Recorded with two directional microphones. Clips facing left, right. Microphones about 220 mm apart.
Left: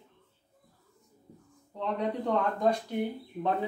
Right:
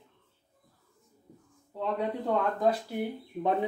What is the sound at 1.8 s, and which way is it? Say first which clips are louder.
Speech: even; 5° right (ahead or behind).